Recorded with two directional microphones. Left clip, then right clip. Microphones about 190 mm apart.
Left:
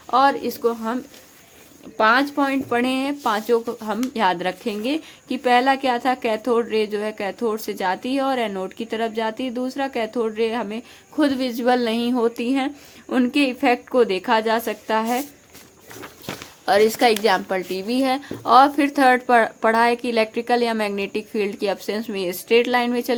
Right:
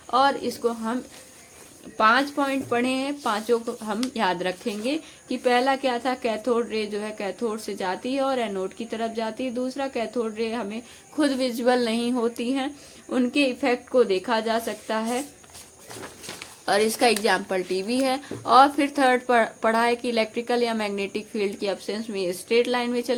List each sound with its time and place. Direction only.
0.1 s a woman's voice: 30° left (ahead or behind)
2.0 s a woman's voice: 25° left (ahead or behind)
16.6 s a woman's voice: 25° left (ahead or behind)